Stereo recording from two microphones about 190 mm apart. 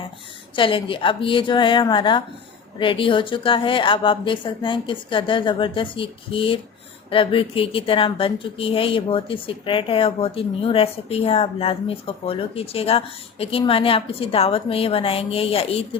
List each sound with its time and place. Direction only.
0.5 s speech: 25° left (ahead or behind)